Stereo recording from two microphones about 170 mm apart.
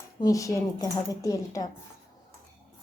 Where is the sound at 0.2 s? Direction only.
20° left (ahead or behind).